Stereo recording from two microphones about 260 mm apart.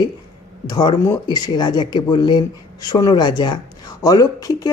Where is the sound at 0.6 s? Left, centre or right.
Centre.